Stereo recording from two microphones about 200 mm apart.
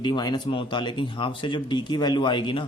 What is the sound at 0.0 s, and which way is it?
A man's voice, 20° left (ahead or behind).